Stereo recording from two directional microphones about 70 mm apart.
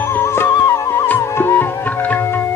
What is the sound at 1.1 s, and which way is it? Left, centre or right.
Music, left.